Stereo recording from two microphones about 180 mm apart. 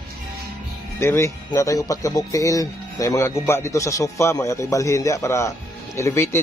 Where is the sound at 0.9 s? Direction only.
15° left (ahead or behind).